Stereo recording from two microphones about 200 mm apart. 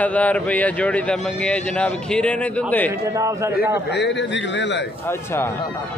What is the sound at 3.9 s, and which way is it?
A man's voice, 60° left (ahead or behind).